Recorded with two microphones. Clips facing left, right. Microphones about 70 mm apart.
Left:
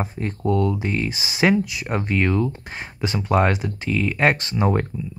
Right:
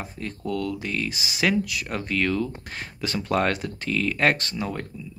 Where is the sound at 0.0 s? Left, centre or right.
Left.